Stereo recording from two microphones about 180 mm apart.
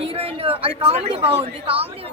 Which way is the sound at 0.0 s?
30° right (ahead or behind).